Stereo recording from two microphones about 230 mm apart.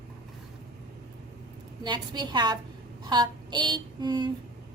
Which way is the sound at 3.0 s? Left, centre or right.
Centre.